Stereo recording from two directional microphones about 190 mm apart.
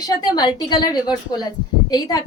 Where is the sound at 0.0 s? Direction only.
20° left (ahead or behind).